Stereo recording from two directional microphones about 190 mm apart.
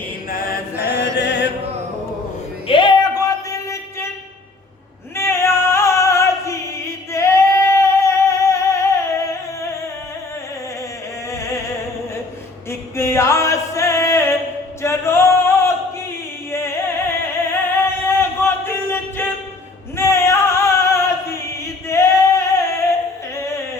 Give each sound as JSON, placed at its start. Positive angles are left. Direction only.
{"t": 0.3, "sound": "chant", "side_deg": 50}
{"t": 0.8, "sound": "chant", "side_deg": -10}
{"t": 1.1, "sound": "music", "side_deg": 60}
{"t": 2.6, "sound": "a sound", "side_deg": 25}
{"t": 5.1, "sound": "music", "side_deg": 15}
{"t": 13.0, "sound": "music", "side_deg": 15}
{"t": 14.8, "sound": "male singing", "side_deg": 15}
{"t": 16.5, "sound": "music", "side_deg": 15}
{"t": 21.8, "sound": "male singing", "side_deg": 15}